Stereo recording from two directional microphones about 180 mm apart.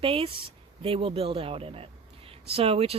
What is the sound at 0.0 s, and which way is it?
Speech, 30° right (ahead or behind).